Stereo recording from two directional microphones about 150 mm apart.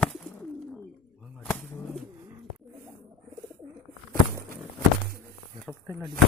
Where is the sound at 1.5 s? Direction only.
15° left (ahead or behind).